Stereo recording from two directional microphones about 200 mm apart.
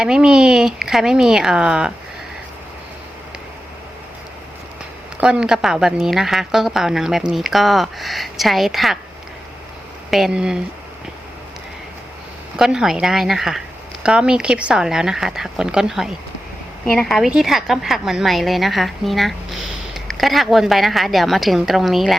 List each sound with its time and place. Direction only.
0.0 s a woman's voice: 5° right (ahead or behind)
5.2 s a woman's voice: 5° right (ahead or behind)
10.1 s a woman's voice: centre (ahead or behind)
12.5 s a woman's voice: centre (ahead or behind)